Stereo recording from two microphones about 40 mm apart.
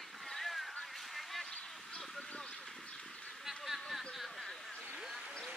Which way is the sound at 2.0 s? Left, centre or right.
Left.